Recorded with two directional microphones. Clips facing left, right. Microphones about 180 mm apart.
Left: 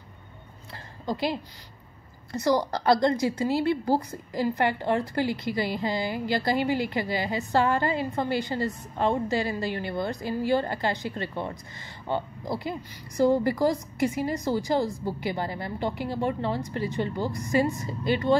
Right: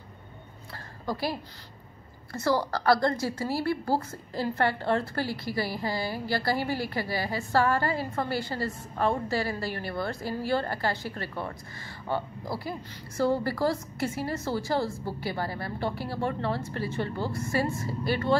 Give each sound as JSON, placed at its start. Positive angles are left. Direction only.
{"t": 1.0, "sound": "a woman's voice", "side_deg": 20}